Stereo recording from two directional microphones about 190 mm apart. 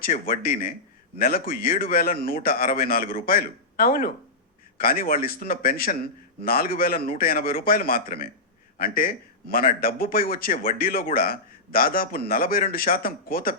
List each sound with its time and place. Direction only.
0.0 s speech: 50° left (ahead or behind)